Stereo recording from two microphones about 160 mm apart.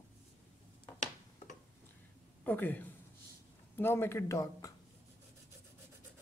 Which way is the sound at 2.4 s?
10° left (ahead or behind).